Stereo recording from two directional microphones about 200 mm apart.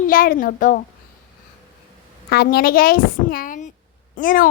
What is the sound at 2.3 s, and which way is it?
A woman's voice, 50° left (ahead or behind).